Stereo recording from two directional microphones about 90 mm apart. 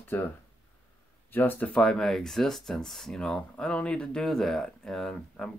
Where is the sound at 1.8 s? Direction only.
5° left (ahead or behind).